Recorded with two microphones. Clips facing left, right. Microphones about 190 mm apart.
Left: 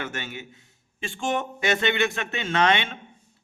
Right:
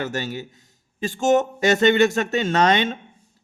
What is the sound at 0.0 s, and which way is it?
A man's voice, 40° right (ahead or behind).